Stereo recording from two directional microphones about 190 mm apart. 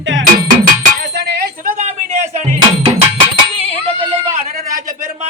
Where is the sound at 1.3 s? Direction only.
50° right (ahead or behind).